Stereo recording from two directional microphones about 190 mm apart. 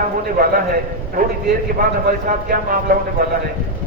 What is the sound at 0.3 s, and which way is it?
A man's voice, 50° right (ahead or behind).